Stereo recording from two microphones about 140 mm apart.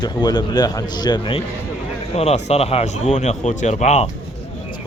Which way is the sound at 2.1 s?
50° left (ahead or behind).